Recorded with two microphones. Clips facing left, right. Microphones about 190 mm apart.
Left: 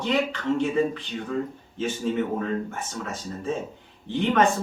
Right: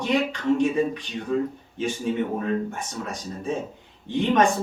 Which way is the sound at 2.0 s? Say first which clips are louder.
Even; 15° right (ahead or behind).